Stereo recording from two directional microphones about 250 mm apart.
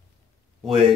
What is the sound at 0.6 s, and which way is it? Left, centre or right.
Speech, centre.